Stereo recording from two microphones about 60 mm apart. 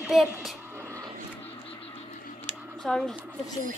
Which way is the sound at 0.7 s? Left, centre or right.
Right.